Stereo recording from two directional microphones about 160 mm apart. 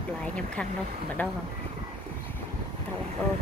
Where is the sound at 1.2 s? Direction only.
10° left (ahead or behind).